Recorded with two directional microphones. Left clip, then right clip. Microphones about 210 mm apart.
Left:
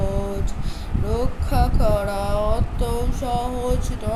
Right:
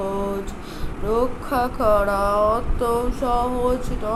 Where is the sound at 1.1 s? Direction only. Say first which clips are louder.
Right 5 dB; 5° left (ahead or behind).